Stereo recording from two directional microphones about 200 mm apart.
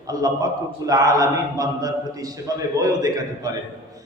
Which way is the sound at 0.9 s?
20° right (ahead or behind).